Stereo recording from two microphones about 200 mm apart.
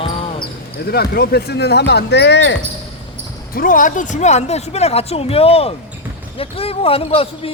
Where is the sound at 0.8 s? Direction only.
50° left (ahead or behind).